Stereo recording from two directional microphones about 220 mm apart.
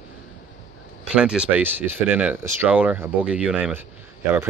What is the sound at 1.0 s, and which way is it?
Speech, 5° right (ahead or behind).